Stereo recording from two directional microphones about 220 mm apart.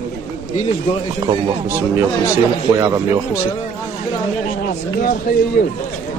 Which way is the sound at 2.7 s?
15° right (ahead or behind).